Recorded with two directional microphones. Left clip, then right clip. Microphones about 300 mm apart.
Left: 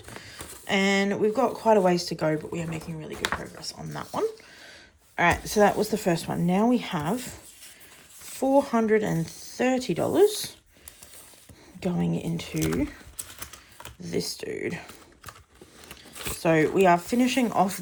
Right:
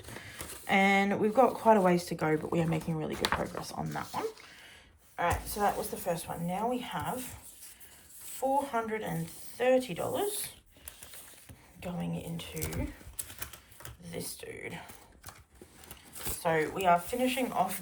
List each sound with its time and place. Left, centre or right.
0.1 s speech: centre
3.9 s speech: centre
8.3 s speech: centre
12.0 s speech: left
12.5 s speech: centre
14.0 s speech: centre
16.4 s speech: centre